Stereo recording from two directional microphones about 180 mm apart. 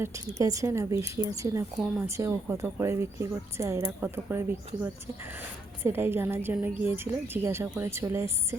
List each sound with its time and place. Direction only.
0.0 s a woman's voice: 15° right (ahead or behind)